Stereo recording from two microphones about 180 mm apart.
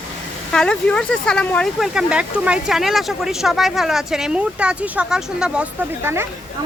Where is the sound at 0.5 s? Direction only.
5° left (ahead or behind).